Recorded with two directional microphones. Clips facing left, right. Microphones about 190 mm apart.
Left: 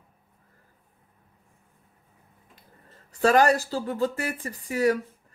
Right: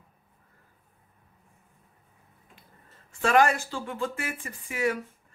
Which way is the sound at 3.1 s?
40° left (ahead or behind).